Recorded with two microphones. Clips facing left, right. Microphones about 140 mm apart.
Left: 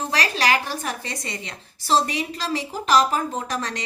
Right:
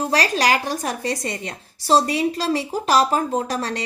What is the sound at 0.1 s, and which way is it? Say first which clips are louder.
A woman's voice: right 2 dB; 35° right (ahead or behind).